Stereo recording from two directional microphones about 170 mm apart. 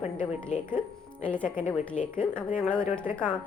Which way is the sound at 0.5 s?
45° left (ahead or behind).